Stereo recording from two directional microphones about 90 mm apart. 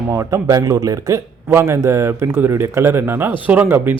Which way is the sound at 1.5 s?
30° right (ahead or behind).